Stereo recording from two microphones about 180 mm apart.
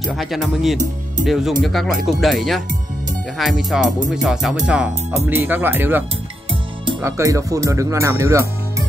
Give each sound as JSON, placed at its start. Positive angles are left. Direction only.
{"t": 0.0, "sound": "speech", "side_deg": 0}